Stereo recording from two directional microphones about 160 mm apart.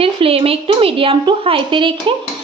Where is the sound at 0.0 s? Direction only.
35° right (ahead or behind).